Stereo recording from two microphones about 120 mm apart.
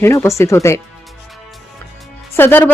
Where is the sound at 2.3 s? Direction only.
20° left (ahead or behind).